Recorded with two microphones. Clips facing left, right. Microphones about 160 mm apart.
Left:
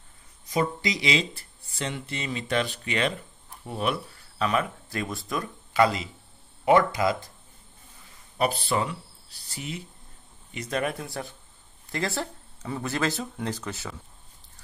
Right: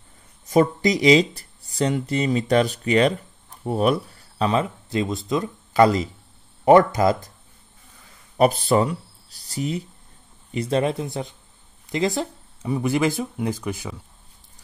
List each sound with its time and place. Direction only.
0.5 s speech: 45° right (ahead or behind); by 5.5 s 20° right (ahead or behind)
5.7 s speech: 40° right (ahead or behind)
8.4 s speech: 45° right (ahead or behind); by 13.9 s 15° right (ahead or behind)